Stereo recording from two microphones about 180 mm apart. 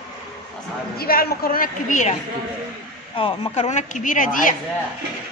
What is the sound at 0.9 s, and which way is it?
A woman's voice, 55° left (ahead or behind).